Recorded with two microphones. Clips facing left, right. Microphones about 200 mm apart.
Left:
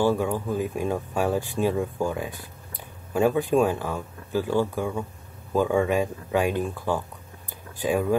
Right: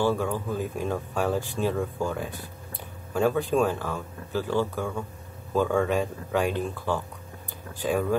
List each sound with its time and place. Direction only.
0.0 s speech: 15° left (ahead or behind)